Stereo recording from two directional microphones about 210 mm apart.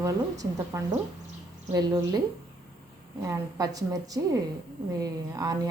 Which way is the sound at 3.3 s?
15° right (ahead or behind).